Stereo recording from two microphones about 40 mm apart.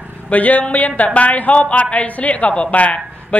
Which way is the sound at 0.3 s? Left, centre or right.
Left.